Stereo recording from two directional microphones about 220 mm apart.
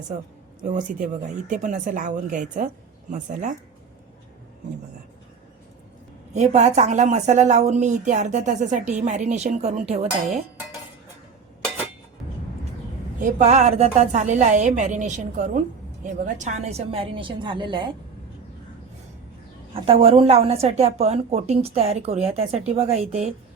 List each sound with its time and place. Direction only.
0.6 s a woman's voice: 35° right (ahead or behind)
6.3 s a woman's voice: 30° right (ahead or behind)
13.2 s a woman's voice: 30° right (ahead or behind)
19.7 s a woman's voice: 25° right (ahead or behind)